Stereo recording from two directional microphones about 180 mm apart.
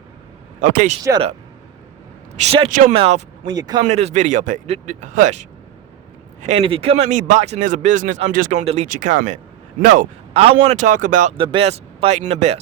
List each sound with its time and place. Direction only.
0.6 s speech: 45° right (ahead or behind)
2.3 s speech: 35° right (ahead or behind)
3.4 s speech: 20° right (ahead or behind)
3.8 s speech: 40° right (ahead or behind)
11.3 s speech: 30° right (ahead or behind)